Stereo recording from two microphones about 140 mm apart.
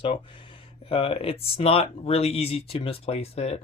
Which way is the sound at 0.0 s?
40° left (ahead or behind).